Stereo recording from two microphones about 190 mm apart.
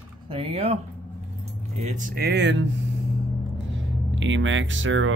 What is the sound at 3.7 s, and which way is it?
Speech, 85° right.